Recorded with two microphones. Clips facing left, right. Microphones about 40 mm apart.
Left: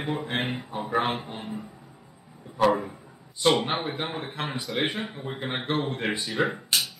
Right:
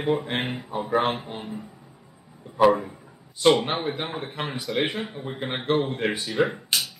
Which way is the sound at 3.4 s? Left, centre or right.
Centre.